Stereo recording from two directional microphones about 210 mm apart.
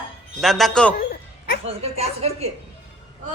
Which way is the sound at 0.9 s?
45° left (ahead or behind).